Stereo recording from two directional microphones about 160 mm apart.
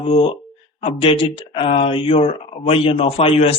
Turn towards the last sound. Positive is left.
turn(degrees=40)  # may be behind; listen again after turning